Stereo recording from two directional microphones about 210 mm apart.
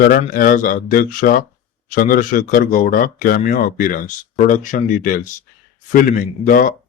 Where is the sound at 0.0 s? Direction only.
45° left (ahead or behind).